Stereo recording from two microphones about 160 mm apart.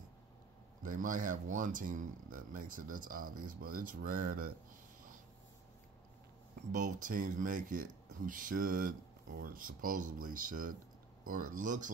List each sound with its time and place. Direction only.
0.8 s speech: 55° right (ahead or behind)
6.7 s speech: 55° right (ahead or behind)